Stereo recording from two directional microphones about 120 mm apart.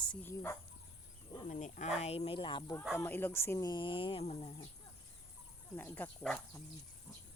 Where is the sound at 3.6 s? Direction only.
40° left (ahead or behind); by 4.5 s 55° left (ahead or behind).